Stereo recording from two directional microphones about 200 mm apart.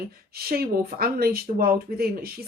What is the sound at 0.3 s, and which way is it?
Speech, 50° right (ahead or behind).